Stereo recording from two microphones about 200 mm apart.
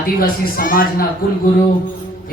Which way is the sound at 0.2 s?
45° left (ahead or behind).